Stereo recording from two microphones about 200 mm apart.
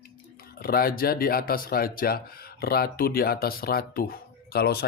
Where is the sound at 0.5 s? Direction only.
50° left (ahead or behind).